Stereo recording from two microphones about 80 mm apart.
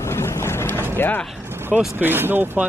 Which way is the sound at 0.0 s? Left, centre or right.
Left.